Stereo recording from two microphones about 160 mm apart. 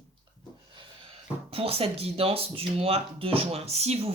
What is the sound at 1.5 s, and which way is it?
Speech, 35° right (ahead or behind).